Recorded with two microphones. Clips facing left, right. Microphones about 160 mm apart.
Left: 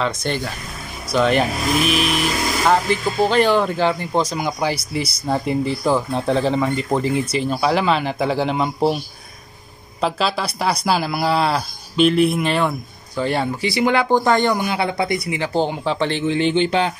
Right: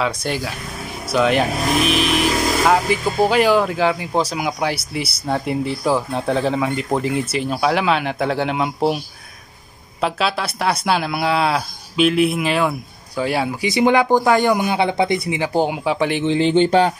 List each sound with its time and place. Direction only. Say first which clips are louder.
0.0 s speech: even; 5° right (ahead or behind)
13.6 s speech: right 5 dB; 20° right (ahead or behind)
15.4 s speech: right 1 dB; 10° right (ahead or behind)
16.3 s speech: right 3 dB; 30° right (ahead or behind)